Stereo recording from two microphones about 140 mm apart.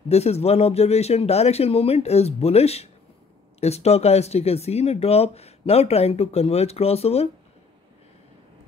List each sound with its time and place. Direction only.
0.1 s speech: 50° left (ahead or behind)